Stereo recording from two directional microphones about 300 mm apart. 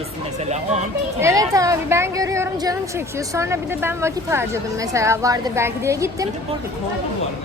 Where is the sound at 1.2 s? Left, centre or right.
Centre.